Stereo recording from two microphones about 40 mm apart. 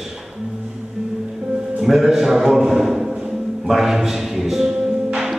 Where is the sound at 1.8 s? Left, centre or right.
Centre.